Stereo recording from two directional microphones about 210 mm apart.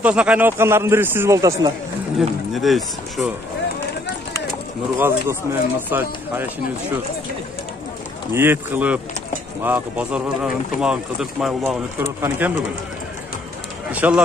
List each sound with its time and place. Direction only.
0.0 s a man's voice: 5° right (ahead or behind)
2.1 s speech: centre (ahead or behind)
5.0 s a man's voice: 10° right (ahead or behind)
8.3 s a man's voice: 10° right (ahead or behind)
13.9 s a man's voice: 5° right (ahead or behind)